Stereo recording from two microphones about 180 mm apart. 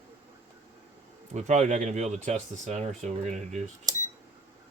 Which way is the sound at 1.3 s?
40° right (ahead or behind).